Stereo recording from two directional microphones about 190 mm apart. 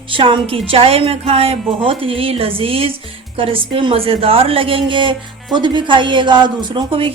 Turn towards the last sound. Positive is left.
turn(degrees=-30)  # may be behind; listen again after turning